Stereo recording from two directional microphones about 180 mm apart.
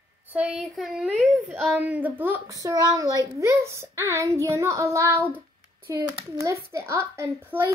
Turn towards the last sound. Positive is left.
turn(degrees=-10)  # may be behind; listen again after turning